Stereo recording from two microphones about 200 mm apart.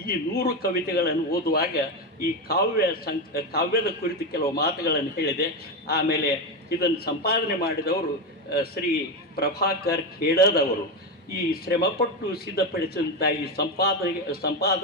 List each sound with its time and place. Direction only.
0.0 s a man's voice: 50° left (ahead or behind)